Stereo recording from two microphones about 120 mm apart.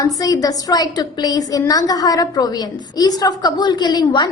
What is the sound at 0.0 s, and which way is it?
A woman's voice, 30° left (ahead or behind).